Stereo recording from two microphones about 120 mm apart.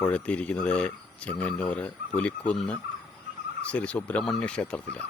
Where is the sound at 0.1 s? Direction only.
10° left (ahead or behind).